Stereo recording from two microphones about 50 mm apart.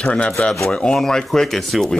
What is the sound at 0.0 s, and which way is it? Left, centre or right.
Speech, left.